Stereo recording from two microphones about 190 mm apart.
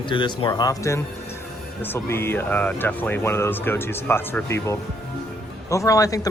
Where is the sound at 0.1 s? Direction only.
25° left (ahead or behind).